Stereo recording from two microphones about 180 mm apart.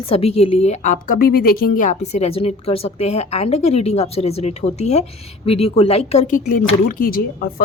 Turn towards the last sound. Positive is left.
turn(degrees=55)  # may be behind; listen again after turning